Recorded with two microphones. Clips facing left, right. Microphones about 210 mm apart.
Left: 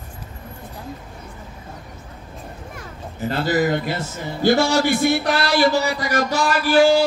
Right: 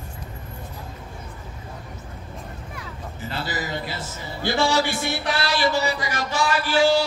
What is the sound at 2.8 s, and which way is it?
A man's voice, 50° left (ahead or behind).